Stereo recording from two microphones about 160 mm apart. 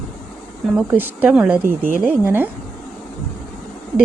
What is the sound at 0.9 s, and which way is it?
Speech, 10° right (ahead or behind).